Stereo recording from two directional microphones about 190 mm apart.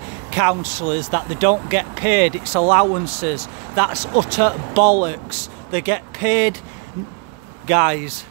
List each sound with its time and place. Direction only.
0.3 s speech: 15° right (ahead or behind)
7.6 s speech: 5° right (ahead or behind)